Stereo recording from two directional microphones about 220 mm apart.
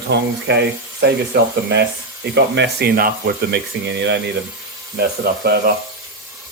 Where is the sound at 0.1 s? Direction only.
50° right (ahead or behind).